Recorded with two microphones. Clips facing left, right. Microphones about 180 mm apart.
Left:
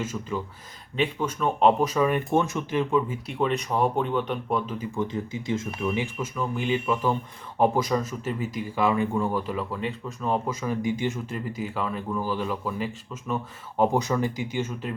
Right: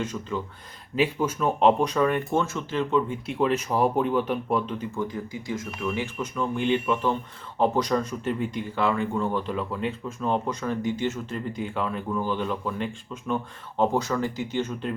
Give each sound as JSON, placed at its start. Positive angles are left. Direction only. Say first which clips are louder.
{"t": 0.0, "sound": "speech", "louder": "even", "side_deg": 10}
{"t": 0.9, "sound": "speech", "louder": "right 2 dB", "side_deg": -5}
{"t": 4.9, "sound": "speech", "louder": "left 2 dB", "side_deg": 25}
{"t": 6.2, "sound": "speech", "louder": "right 2 dB", "side_deg": 5}